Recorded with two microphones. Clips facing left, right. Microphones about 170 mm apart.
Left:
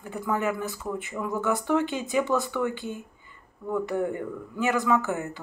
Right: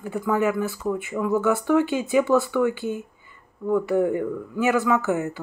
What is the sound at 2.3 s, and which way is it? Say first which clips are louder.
Speech: right 6 dB; 5° right (ahead or behind).